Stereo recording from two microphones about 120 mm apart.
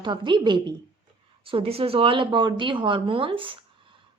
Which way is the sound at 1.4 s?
50° right (ahead or behind).